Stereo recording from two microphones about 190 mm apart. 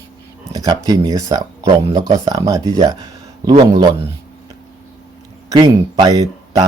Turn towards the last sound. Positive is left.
turn(degrees=-20)  # may be behind; listen again after turning